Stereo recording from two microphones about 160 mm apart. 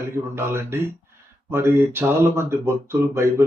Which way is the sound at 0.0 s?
15° right (ahead or behind).